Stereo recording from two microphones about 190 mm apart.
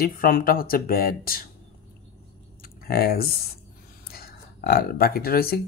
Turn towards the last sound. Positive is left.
turn(degrees=55)  # may be behind; listen again after turning